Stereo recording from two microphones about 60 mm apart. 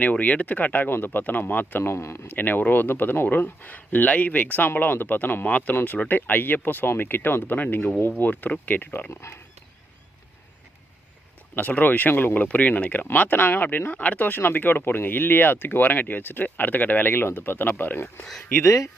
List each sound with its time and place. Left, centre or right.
0.0 s speech: left
1.8 s speech: left
2.2 s speech: left
8.9 s speech: left
11.5 s speech: left
18.6 s speech: left